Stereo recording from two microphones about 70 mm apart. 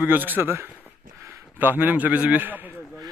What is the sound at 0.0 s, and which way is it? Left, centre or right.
A man's voice, right.